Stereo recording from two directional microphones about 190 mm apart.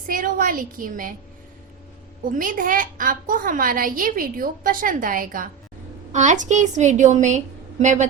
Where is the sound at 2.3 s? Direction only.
45° right (ahead or behind).